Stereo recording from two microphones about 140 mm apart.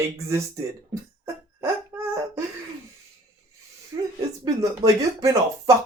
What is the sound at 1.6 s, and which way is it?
Dog, 20° right (ahead or behind).